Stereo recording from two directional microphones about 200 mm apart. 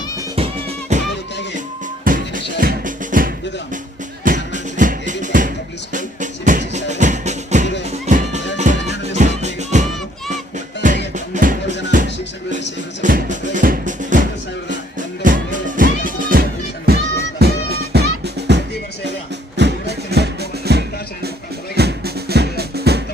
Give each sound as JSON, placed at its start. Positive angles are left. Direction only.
{"t": 0.3, "sound": "music", "side_deg": -35}
{"t": 2.0, "sound": "music", "side_deg": -40}
{"t": 13.0, "sound": "music", "side_deg": -40}